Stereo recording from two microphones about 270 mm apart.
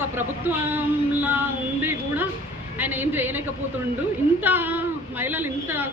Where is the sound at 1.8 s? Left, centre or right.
Centre.